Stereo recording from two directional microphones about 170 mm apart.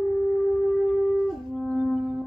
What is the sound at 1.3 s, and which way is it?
Brass instrument, centre (ahead or behind).